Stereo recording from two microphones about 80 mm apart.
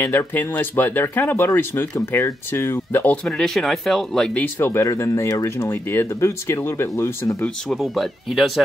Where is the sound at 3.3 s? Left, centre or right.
Centre.